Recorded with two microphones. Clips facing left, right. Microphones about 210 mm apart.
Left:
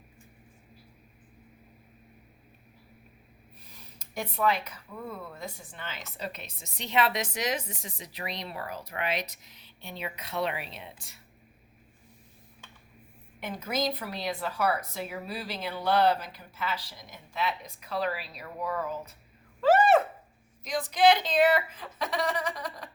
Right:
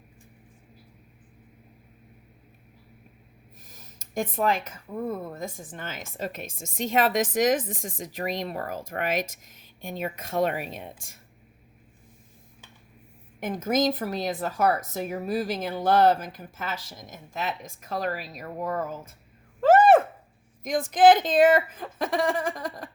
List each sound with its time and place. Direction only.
3.6 s speech: 45° right (ahead or behind)
13.4 s speech: 45° right (ahead or behind)
19.6 s a sound: 50° right (ahead or behind)
20.7 s speech: 50° right (ahead or behind)